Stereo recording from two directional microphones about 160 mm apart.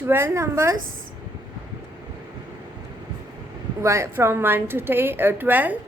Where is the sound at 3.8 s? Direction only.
20° right (ahead or behind).